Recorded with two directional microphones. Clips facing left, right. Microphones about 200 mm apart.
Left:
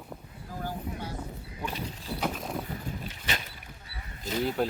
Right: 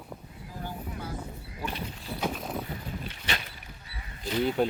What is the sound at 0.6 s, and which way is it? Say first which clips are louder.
Vehicle: left 2 dB; 30° left (ahead or behind).